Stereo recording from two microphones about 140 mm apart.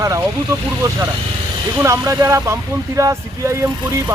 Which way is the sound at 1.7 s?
20° right (ahead or behind).